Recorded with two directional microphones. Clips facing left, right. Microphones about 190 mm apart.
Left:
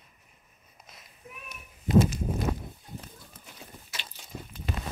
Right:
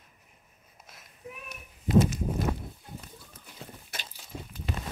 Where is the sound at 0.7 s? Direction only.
5° right (ahead or behind).